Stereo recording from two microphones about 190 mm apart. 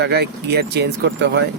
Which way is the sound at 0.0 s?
60° right (ahead or behind).